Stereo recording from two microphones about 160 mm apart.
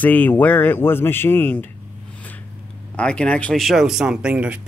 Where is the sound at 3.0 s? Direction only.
5° left (ahead or behind).